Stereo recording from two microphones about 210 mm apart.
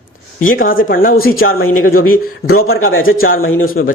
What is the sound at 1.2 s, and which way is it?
Speech, 75° left (ahead or behind).